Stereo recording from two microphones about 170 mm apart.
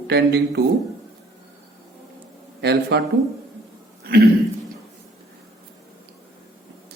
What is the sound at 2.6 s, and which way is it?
Speech, 75° right (ahead or behind).